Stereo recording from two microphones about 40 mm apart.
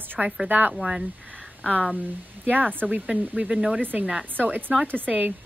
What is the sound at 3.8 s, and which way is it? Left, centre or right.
Speech, right.